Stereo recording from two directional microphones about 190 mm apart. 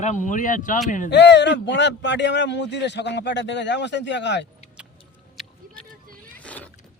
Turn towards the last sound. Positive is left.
turn(degrees=5)  # may be behind; listen again after turning